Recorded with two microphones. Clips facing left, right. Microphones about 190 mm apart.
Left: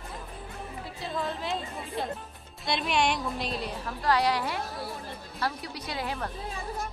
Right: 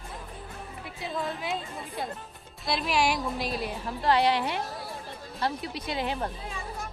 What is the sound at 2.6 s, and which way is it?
A woman's voice, centre (ahead or behind).